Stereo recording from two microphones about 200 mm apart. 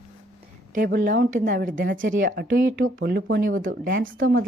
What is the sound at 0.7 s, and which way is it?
A woman's voice, 45° right (ahead or behind).